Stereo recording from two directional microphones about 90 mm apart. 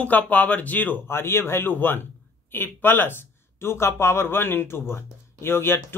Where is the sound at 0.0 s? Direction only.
20° left (ahead or behind).